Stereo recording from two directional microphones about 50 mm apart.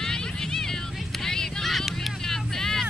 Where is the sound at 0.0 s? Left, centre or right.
Centre.